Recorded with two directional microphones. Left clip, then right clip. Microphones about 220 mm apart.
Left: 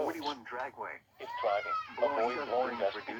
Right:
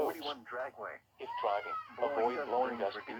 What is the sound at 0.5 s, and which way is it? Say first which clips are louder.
Speech: left 1 dB; 50° left (ahead or behind).